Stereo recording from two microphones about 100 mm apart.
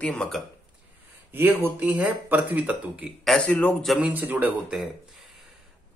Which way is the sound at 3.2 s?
5° left (ahead or behind).